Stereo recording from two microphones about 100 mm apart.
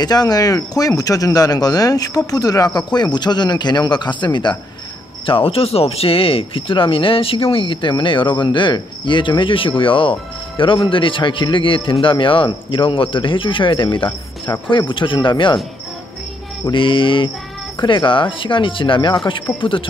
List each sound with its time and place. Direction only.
0.0 s speech: 40° left (ahead or behind)
5.2 s speech: 65° left (ahead or behind)
16.7 s speech: 55° left (ahead or behind)